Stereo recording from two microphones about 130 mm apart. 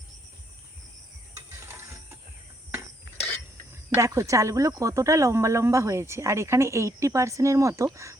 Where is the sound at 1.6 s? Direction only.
20° right (ahead or behind).